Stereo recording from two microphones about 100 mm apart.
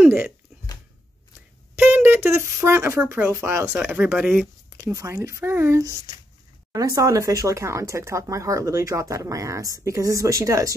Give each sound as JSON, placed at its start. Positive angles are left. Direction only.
{"t": 0.0, "sound": "speech", "side_deg": -20}
{"t": 1.8, "sound": "speech", "side_deg": -20}
{"t": 3.8, "sound": "speech", "side_deg": -10}
{"t": 4.7, "sound": "speech", "side_deg": -30}